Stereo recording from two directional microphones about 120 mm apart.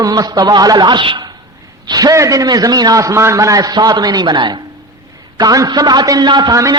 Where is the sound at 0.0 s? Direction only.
30° right (ahead or behind).